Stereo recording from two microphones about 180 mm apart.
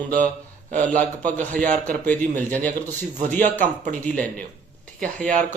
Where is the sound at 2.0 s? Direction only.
10° left (ahead or behind).